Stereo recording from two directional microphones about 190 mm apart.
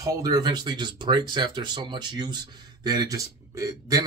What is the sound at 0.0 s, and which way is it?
A man's voice, 20° right (ahead or behind).